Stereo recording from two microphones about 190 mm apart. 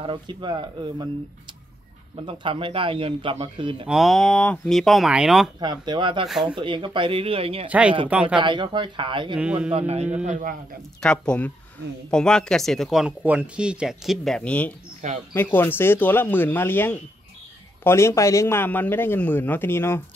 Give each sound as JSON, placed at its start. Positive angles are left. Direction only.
{"t": 0.0, "sound": "a man's voice", "side_deg": -25}
{"t": 2.1, "sound": "a man's voice", "side_deg": -25}
{"t": 3.8, "sound": "speech", "side_deg": 0}
{"t": 5.6, "sound": "a man's voice", "side_deg": -25}
{"t": 6.2, "sound": "speech", "side_deg": 0}
{"t": 6.5, "sound": "a man's voice", "side_deg": -25}
{"t": 8.1, "sound": "speech", "side_deg": -5}
{"t": 8.4, "sound": "a man's voice", "side_deg": -25}
{"t": 9.3, "sound": "speech", "side_deg": -5}
{"t": 9.7, "sound": "a man's voice", "side_deg": -35}
{"t": 11.0, "sound": "speech", "side_deg": 5}
{"t": 15.0, "sound": "a man's voice", "side_deg": -40}
{"t": 15.3, "sound": "a man's voice", "side_deg": 10}